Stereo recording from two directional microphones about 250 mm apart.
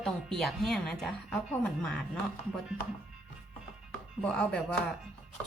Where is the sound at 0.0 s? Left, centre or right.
Centre.